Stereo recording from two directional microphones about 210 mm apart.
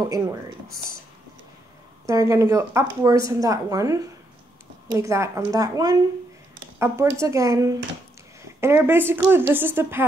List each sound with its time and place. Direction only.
0.0 s a woman's voice: 15° right (ahead or behind)
2.0 s a woman's voice: 15° right (ahead or behind)